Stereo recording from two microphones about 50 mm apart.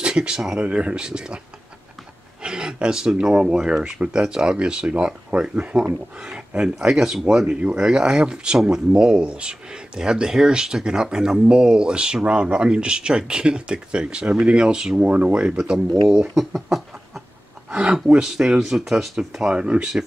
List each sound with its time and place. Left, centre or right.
0.0 s speech: centre
0.6 s speech: right
2.4 s a sound: centre
3.3 s speech: centre
17.6 s speech: right